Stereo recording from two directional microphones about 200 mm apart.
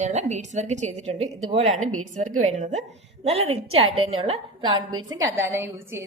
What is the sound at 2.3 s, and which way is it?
Speech, 90° right.